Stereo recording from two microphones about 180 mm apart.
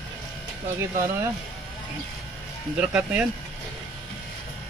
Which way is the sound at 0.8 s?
15° right (ahead or behind).